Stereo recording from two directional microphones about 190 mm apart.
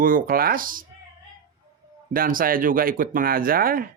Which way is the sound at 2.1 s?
50° right (ahead or behind).